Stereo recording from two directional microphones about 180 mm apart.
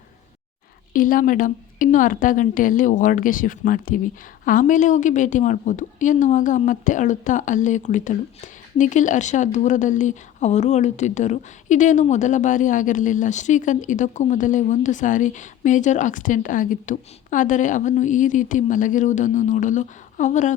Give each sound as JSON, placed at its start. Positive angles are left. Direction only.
{"t": 0.9, "sound": "a woman's voice", "side_deg": 50}